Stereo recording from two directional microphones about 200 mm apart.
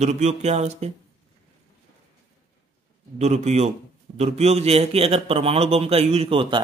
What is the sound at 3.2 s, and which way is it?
A man's voice, 35° right (ahead or behind).